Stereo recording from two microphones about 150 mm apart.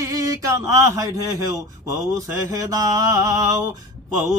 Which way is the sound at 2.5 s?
25° right (ahead or behind).